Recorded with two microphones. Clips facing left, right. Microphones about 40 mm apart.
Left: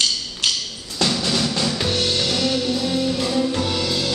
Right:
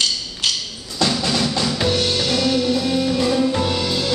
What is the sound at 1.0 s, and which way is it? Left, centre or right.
Music, centre.